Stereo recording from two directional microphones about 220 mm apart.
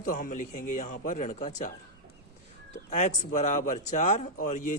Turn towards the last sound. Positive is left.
turn(degrees=35)  # may be behind; listen again after turning